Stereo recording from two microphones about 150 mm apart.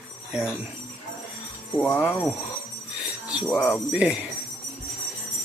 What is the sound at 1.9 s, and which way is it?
Speech, 15° left (ahead or behind).